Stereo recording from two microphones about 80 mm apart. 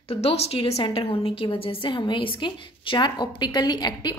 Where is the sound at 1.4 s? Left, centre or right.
Left.